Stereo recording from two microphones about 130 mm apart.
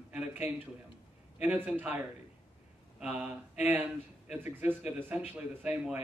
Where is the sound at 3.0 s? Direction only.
15° right (ahead or behind).